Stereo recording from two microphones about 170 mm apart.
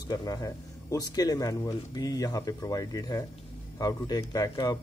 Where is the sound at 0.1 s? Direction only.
20° left (ahead or behind).